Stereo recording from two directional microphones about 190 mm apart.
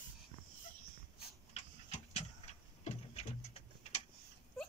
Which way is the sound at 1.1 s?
35° left (ahead or behind).